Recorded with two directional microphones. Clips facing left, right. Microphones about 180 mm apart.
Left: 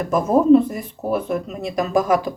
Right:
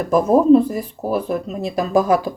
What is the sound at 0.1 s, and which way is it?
Speech, 35° right (ahead or behind).